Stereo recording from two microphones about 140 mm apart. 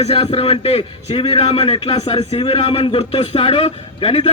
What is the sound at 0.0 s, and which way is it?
A man's voice, 45° left (ahead or behind).